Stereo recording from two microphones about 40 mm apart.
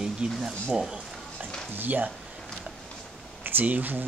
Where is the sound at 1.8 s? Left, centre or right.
Right.